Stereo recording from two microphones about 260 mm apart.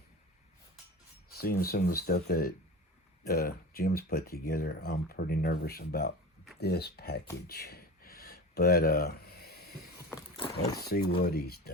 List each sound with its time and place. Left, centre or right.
1.4 s speech: left
7.4 s a sound: left
10.1 s vehicle: centre
10.8 s speech: left